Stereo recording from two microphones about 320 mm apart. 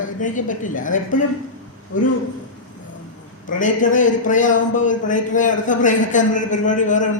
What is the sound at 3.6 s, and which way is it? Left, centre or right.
Speech, left.